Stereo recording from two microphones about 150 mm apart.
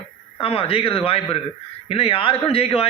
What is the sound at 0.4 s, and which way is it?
A man's voice, 40° left (ahead or behind).